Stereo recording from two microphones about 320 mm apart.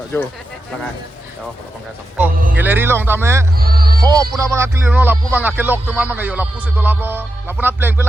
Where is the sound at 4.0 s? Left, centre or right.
Centre.